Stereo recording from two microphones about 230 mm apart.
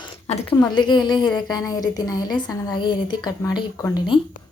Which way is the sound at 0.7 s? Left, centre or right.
Centre.